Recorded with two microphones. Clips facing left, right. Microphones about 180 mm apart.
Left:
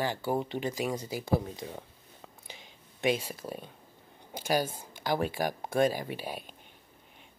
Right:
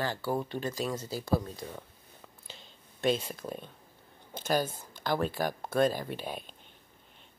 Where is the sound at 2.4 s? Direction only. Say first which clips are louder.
Left 1 dB; 15° left (ahead or behind).